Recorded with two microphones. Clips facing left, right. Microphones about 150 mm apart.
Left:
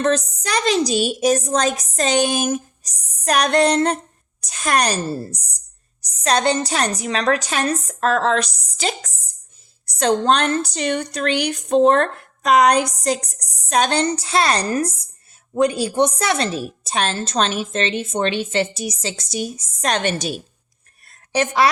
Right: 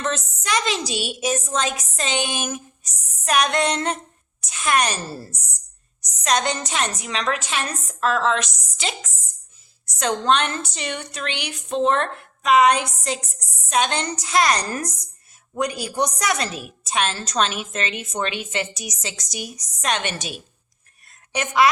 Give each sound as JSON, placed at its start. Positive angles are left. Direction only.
{"t": 0.0, "sound": "a woman's voice", "side_deg": 35}